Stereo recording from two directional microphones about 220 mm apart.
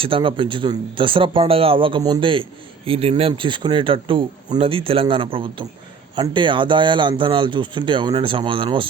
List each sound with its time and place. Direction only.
0.0 s speech: 25° right (ahead or behind)